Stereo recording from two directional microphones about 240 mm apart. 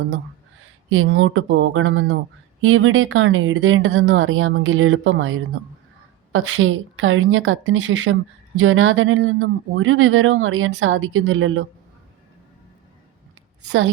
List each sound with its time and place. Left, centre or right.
0.9 s speech: right
13.7 s speech: right